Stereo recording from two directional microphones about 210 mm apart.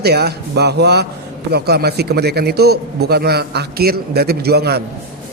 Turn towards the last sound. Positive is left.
turn(degrees=-50)  # may be behind; listen again after turning